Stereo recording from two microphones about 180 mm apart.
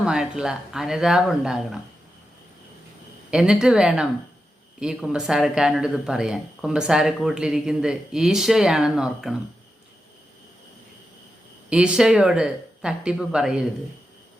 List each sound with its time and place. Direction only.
0.0 s speech: 5° right (ahead or behind)
3.3 s speech: 5° right (ahead or behind)
11.7 s speech: 5° right (ahead or behind)